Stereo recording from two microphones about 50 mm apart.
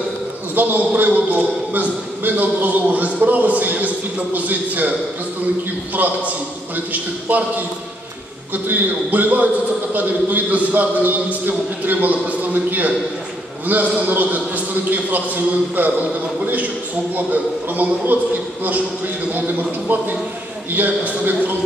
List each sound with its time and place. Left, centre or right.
0.6 s a man's voice: right
6.9 s a man's voice: right
8.6 s a man's voice: right